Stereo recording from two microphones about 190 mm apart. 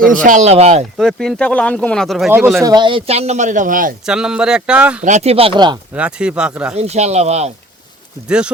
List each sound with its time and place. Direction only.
0.2 s speech: 40° right (ahead or behind)
0.9 s speech: centre (ahead or behind)
2.6 s speech: 20° right (ahead or behind); by 3.9 s 45° right (ahead or behind)
4.0 s speech: 5° right (ahead or behind)
5.0 s speech: 35° right (ahead or behind)
5.9 s speech: 5° right (ahead or behind)
6.7 s speech: 35° right (ahead or behind)